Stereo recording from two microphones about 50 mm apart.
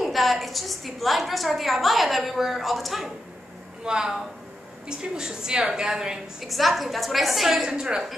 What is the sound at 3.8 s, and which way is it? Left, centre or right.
A woman's voice, centre.